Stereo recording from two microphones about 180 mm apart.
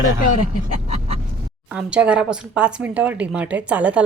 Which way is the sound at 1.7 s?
5° right (ahead or behind).